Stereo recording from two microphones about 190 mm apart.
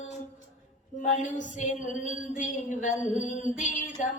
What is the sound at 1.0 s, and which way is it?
Music, 40° left (ahead or behind).